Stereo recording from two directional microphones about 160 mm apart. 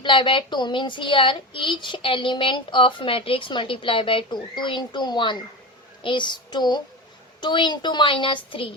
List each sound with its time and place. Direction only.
0.0 s speech: 30° left (ahead or behind)
6.0 s a sound: 30° left (ahead or behind)
7.4 s speech: 30° left (ahead or behind)